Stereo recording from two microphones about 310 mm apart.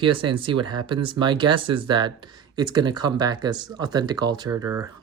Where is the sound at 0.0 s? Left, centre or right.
Centre.